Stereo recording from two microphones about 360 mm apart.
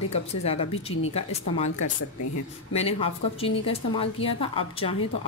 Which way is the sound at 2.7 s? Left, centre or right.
Centre.